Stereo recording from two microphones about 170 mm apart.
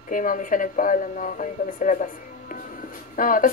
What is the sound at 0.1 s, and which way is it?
Speech, 50° left (ahead or behind).